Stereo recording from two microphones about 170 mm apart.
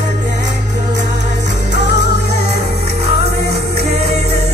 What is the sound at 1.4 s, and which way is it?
Music, 45° right (ahead or behind).